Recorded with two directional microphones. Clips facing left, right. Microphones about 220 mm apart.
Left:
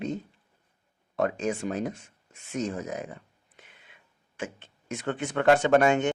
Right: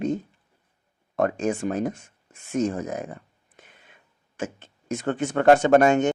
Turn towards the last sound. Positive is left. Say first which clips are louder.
# right 4 dB
turn(degrees=-45)  # may be behind; listen again after turning